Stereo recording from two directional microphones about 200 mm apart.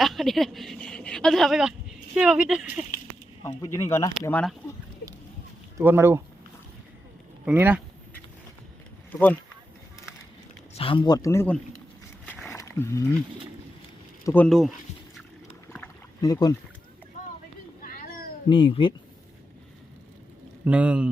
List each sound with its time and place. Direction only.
0.0 s speech: centre (ahead or behind)
3.4 s speech: 15° left (ahead or behind)
5.7 s speech: 10° right (ahead or behind)
7.4 s speech: 10° right (ahead or behind)
10.8 s speech: 25° left (ahead or behind); by 11.6 s 10° left (ahead or behind)
12.3 s roaring cats: 10° left (ahead or behind)
14.3 s speech: 5° left (ahead or behind)
16.2 s speech: 20° left (ahead or behind)
17.8 s cat: 45° left (ahead or behind)
18.4 s speech: 25° left (ahead or behind)
20.7 s speech: 5° right (ahead or behind)